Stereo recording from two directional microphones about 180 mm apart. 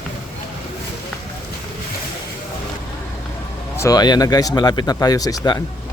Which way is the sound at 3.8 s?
20° left (ahead or behind).